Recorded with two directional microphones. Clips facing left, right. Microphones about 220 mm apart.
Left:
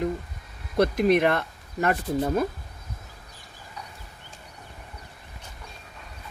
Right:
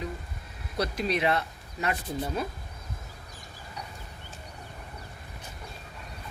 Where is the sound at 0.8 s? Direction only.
50° left (ahead or behind).